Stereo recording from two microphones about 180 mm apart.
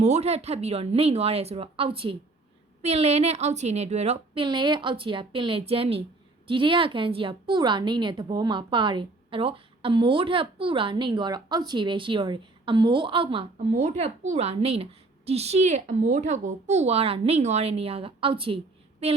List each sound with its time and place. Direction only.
0.0 s a woman's voice: 35° right (ahead or behind)
4.4 s a woman's voice: 25° right (ahead or behind)